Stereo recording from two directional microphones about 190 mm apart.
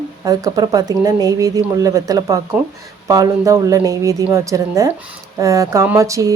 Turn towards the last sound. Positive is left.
turn(degrees=-15)  # may be behind; listen again after turning